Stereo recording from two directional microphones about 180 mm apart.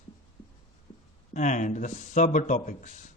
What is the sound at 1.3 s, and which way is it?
A man's voice, 45° left (ahead or behind).